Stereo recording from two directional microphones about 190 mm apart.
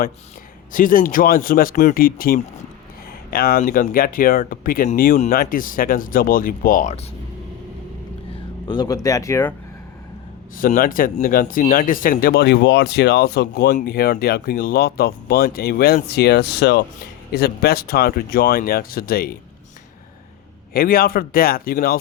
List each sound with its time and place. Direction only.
0.7 s speech: 45° left (ahead or behind)
8.6 s speech: 25° left (ahead or behind)
10.6 s speech: 45° left (ahead or behind)
20.7 s speech: 50° left (ahead or behind)